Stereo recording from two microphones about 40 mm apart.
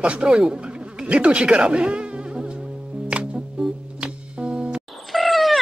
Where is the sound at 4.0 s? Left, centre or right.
Right.